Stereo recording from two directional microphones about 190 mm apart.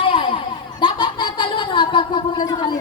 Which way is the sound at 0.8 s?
25° left (ahead or behind).